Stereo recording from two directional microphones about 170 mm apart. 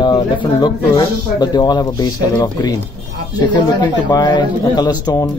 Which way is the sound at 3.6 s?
25° left (ahead or behind).